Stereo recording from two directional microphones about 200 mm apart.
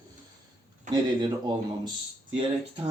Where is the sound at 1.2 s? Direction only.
25° right (ahead or behind).